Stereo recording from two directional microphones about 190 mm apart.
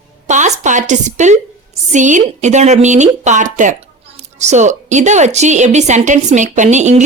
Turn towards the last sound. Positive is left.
turn(degrees=-40)  # may be behind; listen again after turning